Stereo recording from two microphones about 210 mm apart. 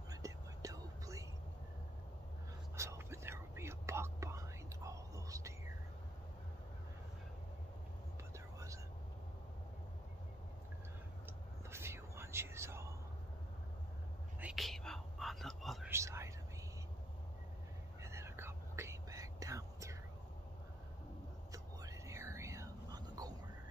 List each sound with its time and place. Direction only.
0.1 s whispering: 15° right (ahead or behind)
2.7 s whispering: 15° right (ahead or behind)
11.7 s whispering: 10° right (ahead or behind)
14.4 s whispering: centre (ahead or behind)
15.9 s whispering: 15° right (ahead or behind)
18.0 s whispering: 15° right (ahead or behind)
21.5 s whispering: 15° right (ahead or behind)